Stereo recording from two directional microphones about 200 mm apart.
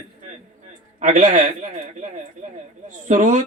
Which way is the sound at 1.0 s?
40° right (ahead or behind).